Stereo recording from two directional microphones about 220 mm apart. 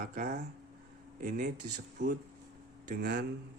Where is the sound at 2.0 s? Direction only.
55° right (ahead or behind).